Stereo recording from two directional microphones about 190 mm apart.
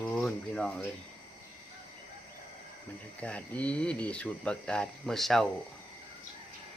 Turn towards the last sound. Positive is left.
turn(degrees=0)  # may be behind; listen again after turning